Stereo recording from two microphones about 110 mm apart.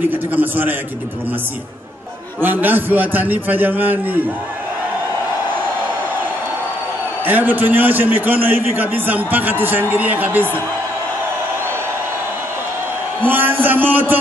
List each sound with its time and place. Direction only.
0.1 s a man's voice: 15° right (ahead or behind)
2.4 s a man's voice: 15° right (ahead or behind)
7.2 s a man's voice: 15° right (ahead or behind)
13.3 s a man's voice: 15° right (ahead or behind)